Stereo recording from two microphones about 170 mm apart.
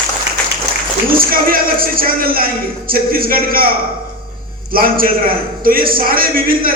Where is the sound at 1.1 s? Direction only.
55° right (ahead or behind).